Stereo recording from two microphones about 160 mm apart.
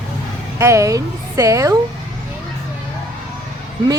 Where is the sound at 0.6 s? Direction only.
20° right (ahead or behind).